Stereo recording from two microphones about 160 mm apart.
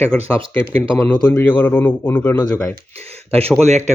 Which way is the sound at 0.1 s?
5° left (ahead or behind).